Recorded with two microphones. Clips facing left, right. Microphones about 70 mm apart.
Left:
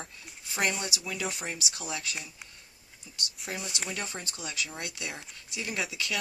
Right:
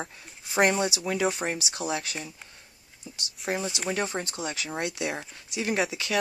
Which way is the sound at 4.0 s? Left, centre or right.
Right.